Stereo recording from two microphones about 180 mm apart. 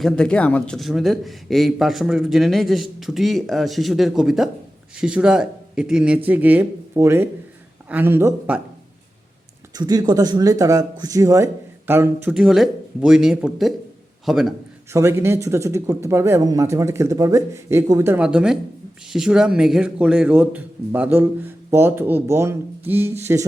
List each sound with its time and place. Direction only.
0.0 s a man's voice: 5° left (ahead or behind); by 8.6 s 10° right (ahead or behind)
9.7 s a man's voice: 20° right (ahead or behind); by 14.4 s centre (ahead or behind)
14.9 s speech: 15° right (ahead or behind)